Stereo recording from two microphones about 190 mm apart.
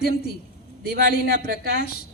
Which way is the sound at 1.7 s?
55° left (ahead or behind).